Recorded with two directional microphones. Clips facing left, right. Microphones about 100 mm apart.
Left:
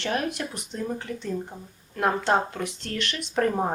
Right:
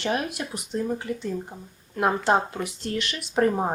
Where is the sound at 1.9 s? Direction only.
15° right (ahead or behind).